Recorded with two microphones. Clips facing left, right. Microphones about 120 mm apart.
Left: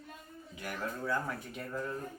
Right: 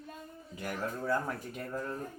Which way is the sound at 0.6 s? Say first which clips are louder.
Right 2 dB; 40° right (ahead or behind).